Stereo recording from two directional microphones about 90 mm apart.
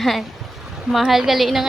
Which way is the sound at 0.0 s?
Centre (ahead or behind).